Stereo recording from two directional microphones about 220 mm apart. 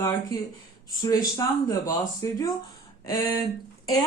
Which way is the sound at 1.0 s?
15° left (ahead or behind).